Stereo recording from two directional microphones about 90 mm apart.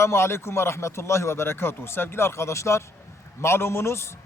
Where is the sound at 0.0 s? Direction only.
30° left (ahead or behind).